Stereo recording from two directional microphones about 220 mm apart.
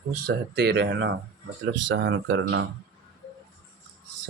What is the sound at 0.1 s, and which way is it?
Speech, 45° right (ahead or behind).